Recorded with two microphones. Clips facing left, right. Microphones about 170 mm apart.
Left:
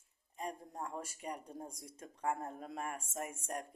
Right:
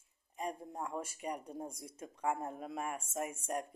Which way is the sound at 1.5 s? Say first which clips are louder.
Right 4 dB; 30° right (ahead or behind).